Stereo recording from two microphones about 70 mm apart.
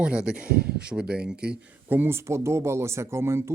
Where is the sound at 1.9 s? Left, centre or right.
Right.